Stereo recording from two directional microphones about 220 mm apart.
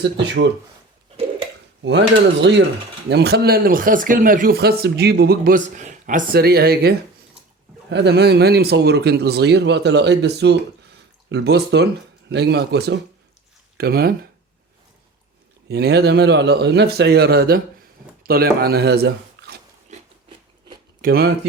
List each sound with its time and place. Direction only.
0.0 s speech: 50° right (ahead or behind)
1.8 s speech: 55° right (ahead or behind)
15.7 s speech: 50° right (ahead or behind)
21.0 s speech: 45° right (ahead or behind)